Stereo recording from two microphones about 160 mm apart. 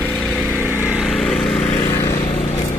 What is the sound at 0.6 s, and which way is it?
Vehicle, 15° left (ahead or behind).